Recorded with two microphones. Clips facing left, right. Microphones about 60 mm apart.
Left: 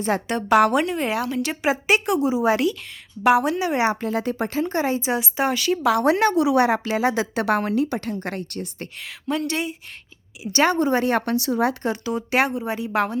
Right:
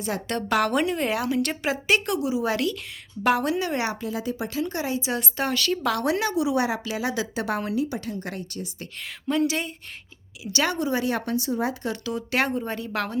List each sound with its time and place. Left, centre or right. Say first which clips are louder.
0.3 s a woman's voice: left 6 dB; centre
1.6 s a woman's voice: left 6 dB; centre
3.9 s speech: left 5 dB; left
5.4 s a woman's voice: left 4 dB; centre
6.1 s a woman's voice: left 6 dB; left
6.8 s speech: left 6 dB; left
7.3 s a woman's voice: left 5 dB; left
9.0 s a woman's voice: right 2 dB; centre
10.4 s speech: left 6 dB; left
11.3 s speech: left 4 dB; left
11.9 s a woman's voice: left 4 dB; left
12.5 s a woman's voice: left 2 dB; centre